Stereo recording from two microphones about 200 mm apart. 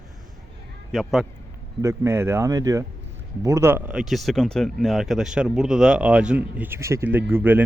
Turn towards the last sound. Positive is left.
turn(degrees=-10)  # may be behind; listen again after turning